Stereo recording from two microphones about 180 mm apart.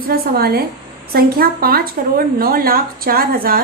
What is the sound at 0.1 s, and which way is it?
A woman's voice, 60° right (ahead or behind).